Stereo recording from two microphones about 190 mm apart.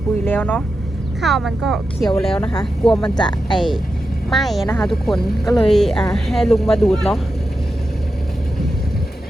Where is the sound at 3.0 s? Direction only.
25° left (ahead or behind).